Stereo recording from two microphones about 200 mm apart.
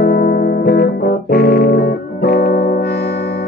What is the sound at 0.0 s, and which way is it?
Music, 50° left (ahead or behind).